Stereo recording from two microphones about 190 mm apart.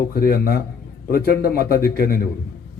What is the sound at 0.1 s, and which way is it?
A man's voice, 55° left (ahead or behind).